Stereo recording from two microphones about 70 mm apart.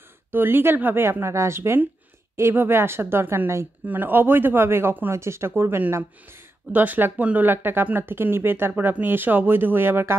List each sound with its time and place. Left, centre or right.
0.3 s speech: right
3.8 s speech: right
6.7 s speech: right